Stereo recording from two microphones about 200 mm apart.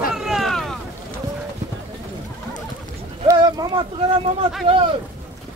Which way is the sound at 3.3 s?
20° right (ahead or behind).